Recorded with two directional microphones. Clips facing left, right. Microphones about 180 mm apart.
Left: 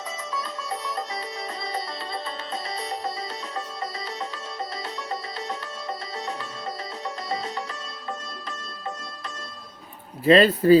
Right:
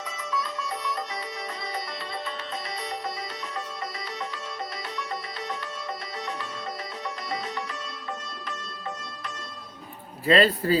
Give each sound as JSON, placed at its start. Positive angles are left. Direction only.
{"t": 0.3, "sound": "music", "side_deg": 25}
{"t": 10.2, "sound": "speech", "side_deg": 20}